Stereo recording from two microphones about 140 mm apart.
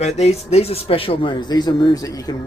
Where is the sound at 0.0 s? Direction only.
50° left (ahead or behind); by 2.3 s 25° left (ahead or behind).